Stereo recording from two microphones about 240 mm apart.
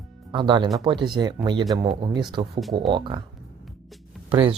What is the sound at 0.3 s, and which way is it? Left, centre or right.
Speech, centre.